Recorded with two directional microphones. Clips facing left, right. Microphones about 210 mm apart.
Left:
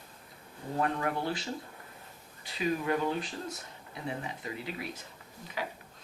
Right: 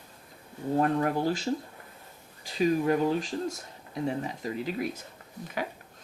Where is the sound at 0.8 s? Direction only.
40° right (ahead or behind).